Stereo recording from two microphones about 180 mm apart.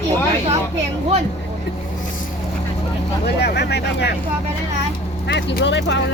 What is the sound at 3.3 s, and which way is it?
Speech, 65° left (ahead or behind).